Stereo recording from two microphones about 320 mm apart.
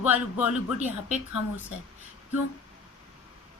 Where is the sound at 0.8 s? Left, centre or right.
Right.